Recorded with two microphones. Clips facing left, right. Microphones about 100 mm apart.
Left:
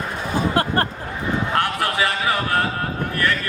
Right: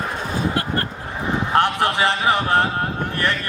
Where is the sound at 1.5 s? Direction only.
25° right (ahead or behind).